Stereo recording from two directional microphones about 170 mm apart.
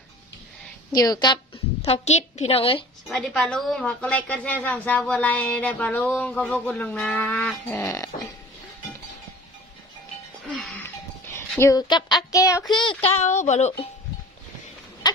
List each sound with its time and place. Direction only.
0.9 s a woman's voice: 20° left (ahead or behind)
1.8 s a woman's voice: 40° left (ahead or behind)
3.1 s a woman's voice: 5° left (ahead or behind)
7.8 s a woman's voice: 20° left (ahead or behind)
10.6 s speech: 10° left (ahead or behind); by 13.8 s 40° left (ahead or behind)
15.0 s a sound: 25° left (ahead or behind)